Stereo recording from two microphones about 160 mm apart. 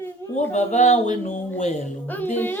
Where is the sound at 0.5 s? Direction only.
45° left (ahead or behind).